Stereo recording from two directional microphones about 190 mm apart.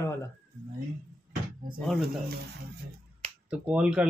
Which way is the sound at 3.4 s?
5° right (ahead or behind).